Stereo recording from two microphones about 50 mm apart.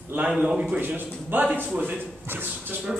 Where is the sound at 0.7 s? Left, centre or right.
Right.